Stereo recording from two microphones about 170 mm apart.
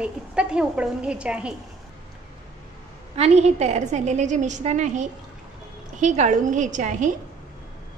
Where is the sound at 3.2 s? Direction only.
40° right (ahead or behind).